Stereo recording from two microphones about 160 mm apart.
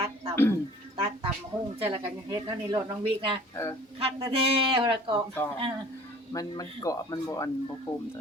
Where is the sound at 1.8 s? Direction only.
25° right (ahead or behind).